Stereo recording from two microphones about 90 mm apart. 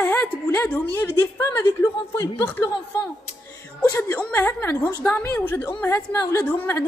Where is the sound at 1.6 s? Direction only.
30° left (ahead or behind).